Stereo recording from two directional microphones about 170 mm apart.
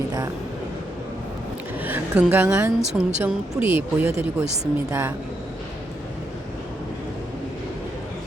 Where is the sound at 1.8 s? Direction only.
10° right (ahead or behind).